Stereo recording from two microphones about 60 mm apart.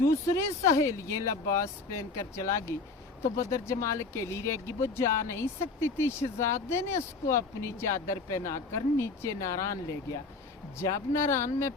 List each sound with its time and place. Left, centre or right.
0.1 s speech: left
10.8 s speech: left